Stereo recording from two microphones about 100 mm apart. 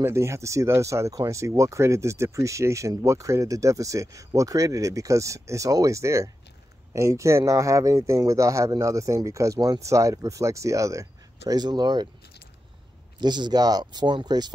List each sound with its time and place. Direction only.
0.0 s speech: 30° right (ahead or behind); by 12.1 s 45° right (ahead or behind)
13.2 s speech: 45° right (ahead or behind)